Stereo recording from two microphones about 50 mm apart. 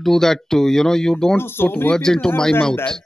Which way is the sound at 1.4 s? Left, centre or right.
Left.